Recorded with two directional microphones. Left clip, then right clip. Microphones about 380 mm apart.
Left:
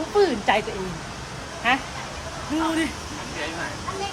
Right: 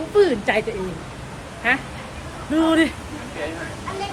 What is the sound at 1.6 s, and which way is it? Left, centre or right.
Speech, centre.